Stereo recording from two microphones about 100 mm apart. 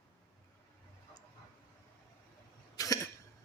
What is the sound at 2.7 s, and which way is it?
Cough, 35° left (ahead or behind).